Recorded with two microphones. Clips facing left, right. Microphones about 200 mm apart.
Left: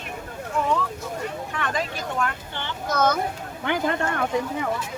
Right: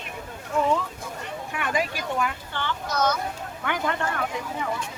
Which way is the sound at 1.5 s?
10° right (ahead or behind).